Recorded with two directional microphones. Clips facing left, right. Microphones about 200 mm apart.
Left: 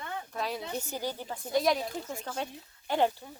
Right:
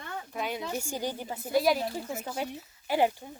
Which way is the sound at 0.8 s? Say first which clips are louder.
Right 2 dB; 15° right (ahead or behind).